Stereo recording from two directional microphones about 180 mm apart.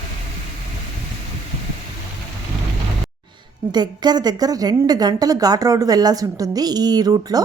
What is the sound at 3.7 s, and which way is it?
A woman's voice, 25° right (ahead or behind).